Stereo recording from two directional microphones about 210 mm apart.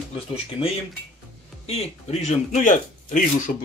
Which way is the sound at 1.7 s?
30° left (ahead or behind).